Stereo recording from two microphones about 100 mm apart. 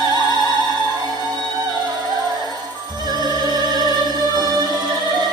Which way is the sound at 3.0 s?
40° right (ahead or behind).